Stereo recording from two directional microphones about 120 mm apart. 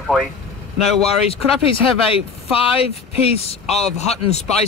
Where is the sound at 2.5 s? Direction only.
55° left (ahead or behind).